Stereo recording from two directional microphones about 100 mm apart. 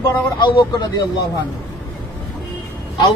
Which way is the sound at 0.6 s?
45° left (ahead or behind).